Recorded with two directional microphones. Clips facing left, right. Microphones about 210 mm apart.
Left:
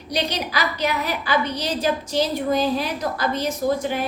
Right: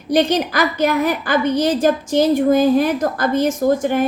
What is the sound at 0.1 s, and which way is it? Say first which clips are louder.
A woman's voice: right 9 dB; 50° right (ahead or behind).